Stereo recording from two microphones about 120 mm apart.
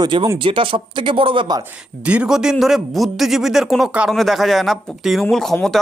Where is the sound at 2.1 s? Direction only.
10° right (ahead or behind).